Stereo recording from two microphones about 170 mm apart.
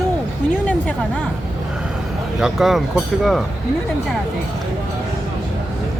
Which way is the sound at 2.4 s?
Centre (ahead or behind).